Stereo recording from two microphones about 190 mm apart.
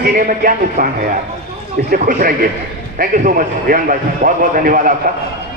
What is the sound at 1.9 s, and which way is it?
A man's voice, 45° right (ahead or behind).